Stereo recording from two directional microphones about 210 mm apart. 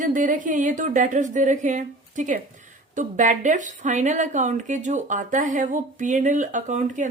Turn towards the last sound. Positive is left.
turn(degrees=-35)  # may be behind; listen again after turning